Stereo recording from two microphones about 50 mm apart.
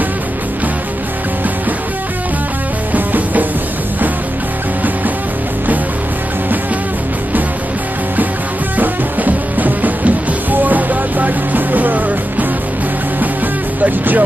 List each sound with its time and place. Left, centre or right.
2.9 s music: right
8.7 s music: right
13.8 s vehicle: right